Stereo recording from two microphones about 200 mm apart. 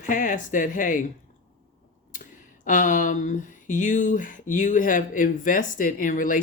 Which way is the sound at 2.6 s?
40° left (ahead or behind).